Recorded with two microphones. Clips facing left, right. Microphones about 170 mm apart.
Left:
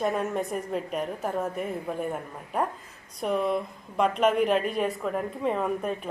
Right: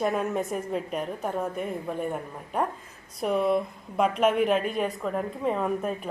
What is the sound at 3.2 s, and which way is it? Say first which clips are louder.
A woman's voice: right 2 dB; centre (ahead or behind).